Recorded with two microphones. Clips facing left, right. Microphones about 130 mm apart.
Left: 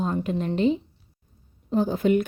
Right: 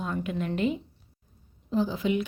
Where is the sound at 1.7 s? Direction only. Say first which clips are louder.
Left 5 dB; 50° left (ahead or behind).